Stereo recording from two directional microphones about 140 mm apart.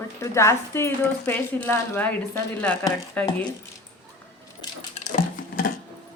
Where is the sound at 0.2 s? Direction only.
20° left (ahead or behind).